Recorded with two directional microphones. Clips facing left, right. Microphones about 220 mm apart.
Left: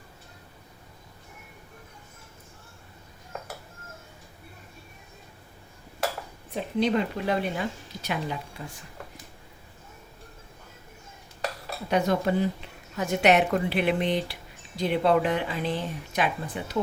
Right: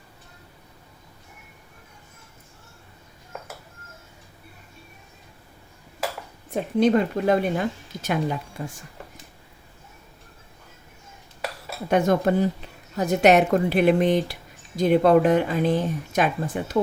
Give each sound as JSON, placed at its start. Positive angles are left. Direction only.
{"t": 6.5, "sound": "speech", "side_deg": -50}
{"t": 11.9, "sound": "speech", "side_deg": -50}